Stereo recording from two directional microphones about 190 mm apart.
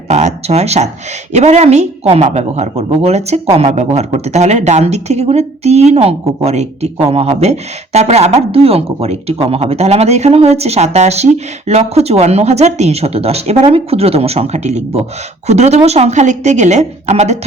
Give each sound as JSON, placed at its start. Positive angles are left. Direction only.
{"t": 0.1, "sound": "speech", "side_deg": -35}